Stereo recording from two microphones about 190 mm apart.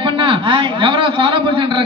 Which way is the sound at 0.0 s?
25° right (ahead or behind).